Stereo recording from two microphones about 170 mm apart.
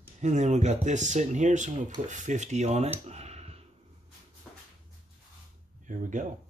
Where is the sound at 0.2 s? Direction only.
45° right (ahead or behind).